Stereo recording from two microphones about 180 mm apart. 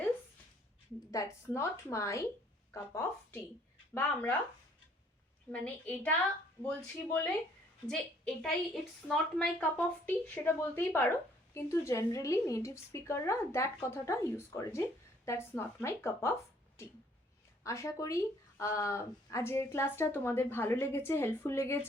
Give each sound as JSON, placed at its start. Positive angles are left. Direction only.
{"t": 1.1, "sound": "a woman's voice", "side_deg": 15}
{"t": 3.9, "sound": "a woman's voice", "side_deg": 10}
{"t": 5.5, "sound": "a woman's voice", "side_deg": 10}
{"t": 8.4, "sound": "a woman's voice", "side_deg": 0}